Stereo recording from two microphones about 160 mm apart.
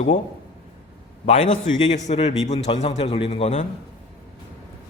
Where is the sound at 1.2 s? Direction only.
50° left (ahead or behind).